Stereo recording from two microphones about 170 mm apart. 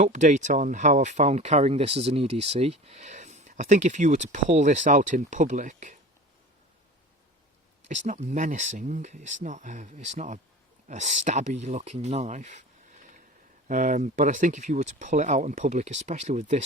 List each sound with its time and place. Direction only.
0.0 s speech: 45° right (ahead or behind)
7.9 s speech: 45° right (ahead or behind)
13.7 s speech: 50° right (ahead or behind)